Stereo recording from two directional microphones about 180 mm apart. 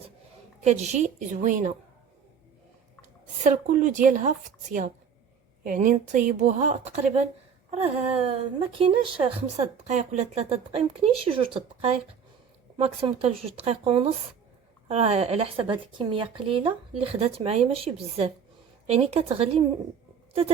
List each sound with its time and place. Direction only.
0.6 s speech: 40° right (ahead or behind)
3.4 s speech: 50° right (ahead or behind); by 9.6 s 30° right (ahead or behind)
9.8 s speech: 40° right (ahead or behind)